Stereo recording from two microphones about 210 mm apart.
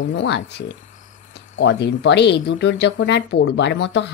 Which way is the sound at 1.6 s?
55° left (ahead or behind).